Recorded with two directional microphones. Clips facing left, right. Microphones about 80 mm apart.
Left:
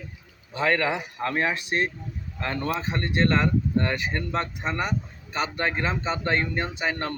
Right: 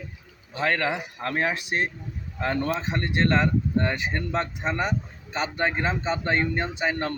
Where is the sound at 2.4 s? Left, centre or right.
Centre.